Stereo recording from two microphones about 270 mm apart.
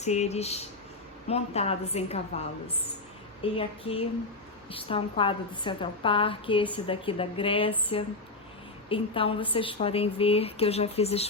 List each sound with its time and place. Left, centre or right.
0.0 s a woman's voice: left
3.6 s a woman's voice: left